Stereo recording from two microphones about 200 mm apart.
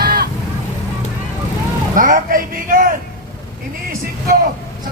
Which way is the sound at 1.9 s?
40° right (ahead or behind).